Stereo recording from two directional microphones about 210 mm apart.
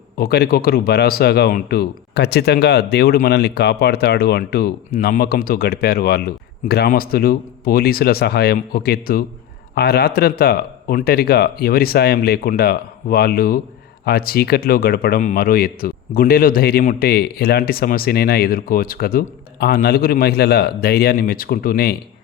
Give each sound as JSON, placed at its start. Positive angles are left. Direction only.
{"t": 0.2, "sound": "speech", "side_deg": 50}